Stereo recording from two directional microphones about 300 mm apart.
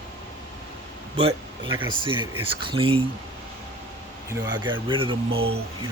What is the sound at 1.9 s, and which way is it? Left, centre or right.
Speech, centre.